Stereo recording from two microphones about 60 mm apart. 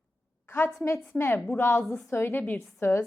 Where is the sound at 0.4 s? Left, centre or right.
Left.